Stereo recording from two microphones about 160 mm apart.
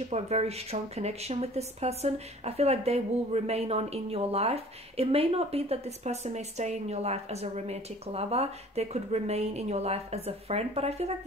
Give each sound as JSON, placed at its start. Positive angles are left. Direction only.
{"t": 0.1, "sound": "speech", "side_deg": -40}